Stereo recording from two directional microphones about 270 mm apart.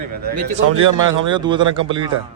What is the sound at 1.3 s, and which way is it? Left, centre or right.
Speech, centre.